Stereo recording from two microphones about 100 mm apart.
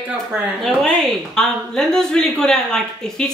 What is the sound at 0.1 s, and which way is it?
Speech, 15° right (ahead or behind).